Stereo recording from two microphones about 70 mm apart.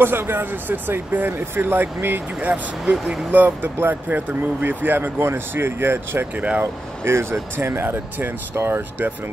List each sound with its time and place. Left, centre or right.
0.0 s speech: right
2.8 s speech: centre
3.3 s speech: right